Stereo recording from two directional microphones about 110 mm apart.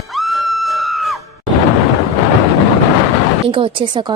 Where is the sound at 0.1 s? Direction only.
Centre (ahead or behind).